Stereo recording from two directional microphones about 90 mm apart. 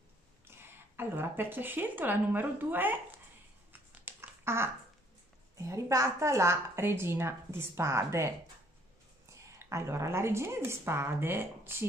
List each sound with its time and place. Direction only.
0.6 s a woman's voice: 25° right (ahead or behind)
3.9 s a sound: 25° right (ahead or behind)
5.6 s a woman's voice: 35° right (ahead or behind)
9.3 s a woman's voice: 35° right (ahead or behind)